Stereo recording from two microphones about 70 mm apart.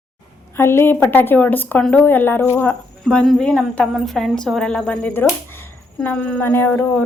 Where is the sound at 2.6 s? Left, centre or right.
Centre.